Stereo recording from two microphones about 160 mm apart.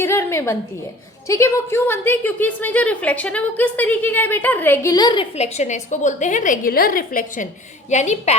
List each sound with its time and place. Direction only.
0.0 s a sound: 15° left (ahead or behind)
1.3 s a woman's voice: 20° left (ahead or behind)
5.5 s a woman's voice: 50° left (ahead or behind)
7.9 s a woman's voice: 45° left (ahead or behind)